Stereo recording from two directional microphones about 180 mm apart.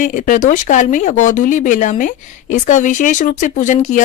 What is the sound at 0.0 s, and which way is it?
A woman's voice, 45° left (ahead or behind).